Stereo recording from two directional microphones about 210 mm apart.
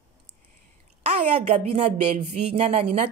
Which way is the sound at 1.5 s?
30° right (ahead or behind).